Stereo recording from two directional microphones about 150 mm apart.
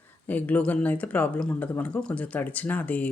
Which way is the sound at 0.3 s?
10° left (ahead or behind).